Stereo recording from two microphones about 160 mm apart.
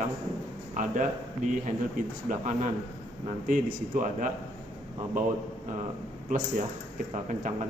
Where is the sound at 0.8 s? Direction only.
55° right (ahead or behind).